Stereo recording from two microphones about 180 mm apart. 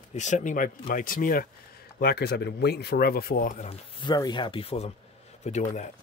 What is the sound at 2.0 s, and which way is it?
Speech, 60° left (ahead or behind).